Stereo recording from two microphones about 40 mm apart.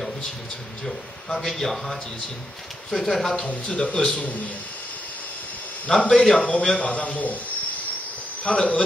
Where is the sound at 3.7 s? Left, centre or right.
Left.